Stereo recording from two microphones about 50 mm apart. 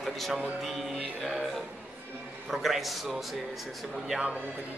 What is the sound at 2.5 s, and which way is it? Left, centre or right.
Speech, centre.